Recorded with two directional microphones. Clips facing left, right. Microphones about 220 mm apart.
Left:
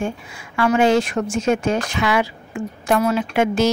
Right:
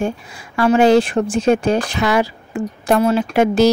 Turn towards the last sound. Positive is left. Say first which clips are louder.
# right 4 dB
turn(degrees=-35)  # may be behind; listen again after turning